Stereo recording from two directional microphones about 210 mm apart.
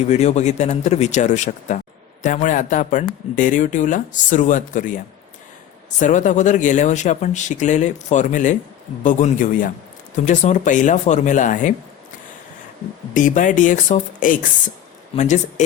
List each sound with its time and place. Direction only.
0.1 s speech: 30° left (ahead or behind)
6.0 s speech: 35° left (ahead or behind)
13.1 s speech: 40° left (ahead or behind)